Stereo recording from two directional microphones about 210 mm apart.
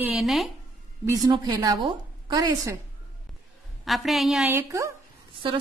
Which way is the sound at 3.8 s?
Centre (ahead or behind).